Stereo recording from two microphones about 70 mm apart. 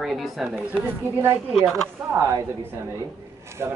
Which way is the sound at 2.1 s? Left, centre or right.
Right.